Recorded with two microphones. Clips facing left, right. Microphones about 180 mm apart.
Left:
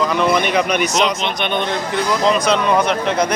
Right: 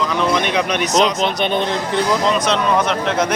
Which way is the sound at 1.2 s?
35° right (ahead or behind).